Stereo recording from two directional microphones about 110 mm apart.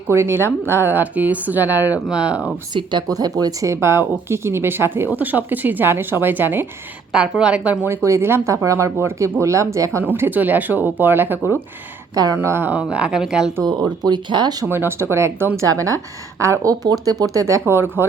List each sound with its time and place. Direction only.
0.1 s a woman's voice: 25° right (ahead or behind)
2.7 s speech: 40° right (ahead or behind); by 6.7 s 20° right (ahead or behind)
7.1 s a woman's voice: 10° right (ahead or behind)
7.9 s speech: 25° right (ahead or behind)
10.2 s a woman's voice: 15° right (ahead or behind)
13.8 s speech: 40° right (ahead or behind)
14.7 s speech: 20° right (ahead or behind)